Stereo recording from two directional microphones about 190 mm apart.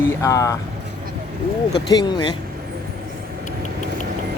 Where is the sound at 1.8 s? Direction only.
20° left (ahead or behind).